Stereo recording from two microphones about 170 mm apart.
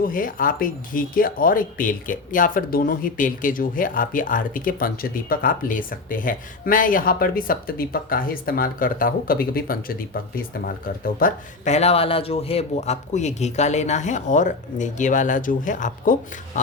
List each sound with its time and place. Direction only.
0.0 s speech: 55° left (ahead or behind)